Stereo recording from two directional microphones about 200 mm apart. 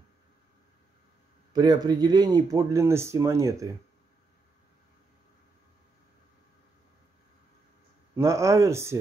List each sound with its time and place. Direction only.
1.5 s speech: 20° right (ahead or behind)
8.2 s speech: 15° right (ahead or behind)